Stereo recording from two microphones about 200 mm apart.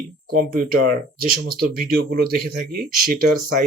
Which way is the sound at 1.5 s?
45° right (ahead or behind).